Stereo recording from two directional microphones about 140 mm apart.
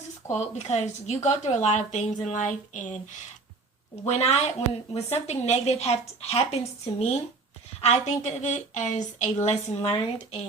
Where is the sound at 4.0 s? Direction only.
50° left (ahead or behind).